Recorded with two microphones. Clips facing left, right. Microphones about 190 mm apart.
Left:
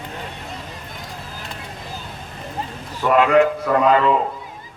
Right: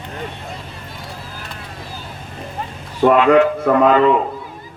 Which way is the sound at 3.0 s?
55° right (ahead or behind).